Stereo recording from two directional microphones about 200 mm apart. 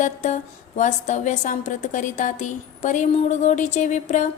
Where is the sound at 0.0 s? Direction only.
40° left (ahead or behind).